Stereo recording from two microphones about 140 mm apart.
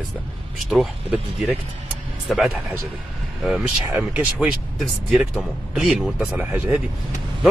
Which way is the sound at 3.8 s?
10° right (ahead or behind).